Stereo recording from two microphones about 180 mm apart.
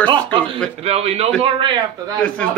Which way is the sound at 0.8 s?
35° right (ahead or behind).